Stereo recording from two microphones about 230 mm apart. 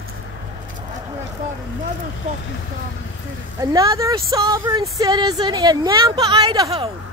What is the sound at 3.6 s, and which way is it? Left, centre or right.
Speech, centre.